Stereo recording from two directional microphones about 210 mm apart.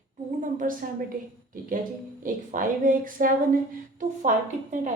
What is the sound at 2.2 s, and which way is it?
A woman's voice, 40° right (ahead or behind).